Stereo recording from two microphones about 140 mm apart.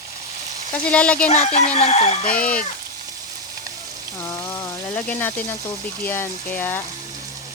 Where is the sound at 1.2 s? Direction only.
50° left (ahead or behind).